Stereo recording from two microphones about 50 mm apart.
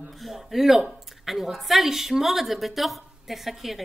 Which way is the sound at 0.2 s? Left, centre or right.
Centre.